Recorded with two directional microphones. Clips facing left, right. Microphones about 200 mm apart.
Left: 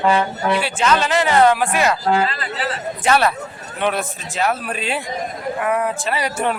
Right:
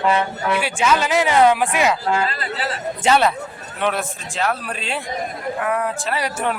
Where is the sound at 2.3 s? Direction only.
40° right (ahead or behind).